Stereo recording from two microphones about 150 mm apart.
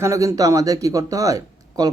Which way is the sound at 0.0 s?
20° right (ahead or behind).